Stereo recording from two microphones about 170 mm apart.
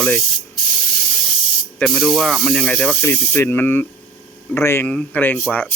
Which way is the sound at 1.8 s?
Centre (ahead or behind).